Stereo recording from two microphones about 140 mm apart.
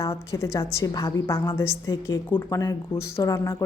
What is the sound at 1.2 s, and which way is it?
Speech, 20° left (ahead or behind).